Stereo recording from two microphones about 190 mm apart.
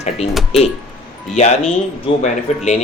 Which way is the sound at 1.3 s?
35° left (ahead or behind).